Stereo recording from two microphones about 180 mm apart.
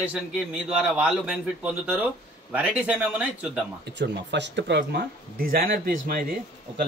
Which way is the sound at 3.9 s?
70° right (ahead or behind).